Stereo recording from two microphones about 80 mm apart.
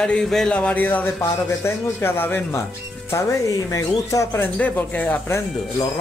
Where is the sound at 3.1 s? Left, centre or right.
Left.